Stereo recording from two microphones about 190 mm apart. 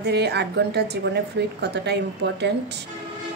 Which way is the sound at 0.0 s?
60° right (ahead or behind).